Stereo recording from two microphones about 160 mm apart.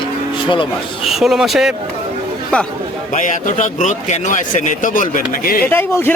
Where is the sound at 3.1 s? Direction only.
50° left (ahead or behind).